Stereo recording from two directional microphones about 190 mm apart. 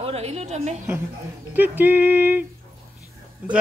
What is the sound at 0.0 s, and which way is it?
Speech, 30° right (ahead or behind).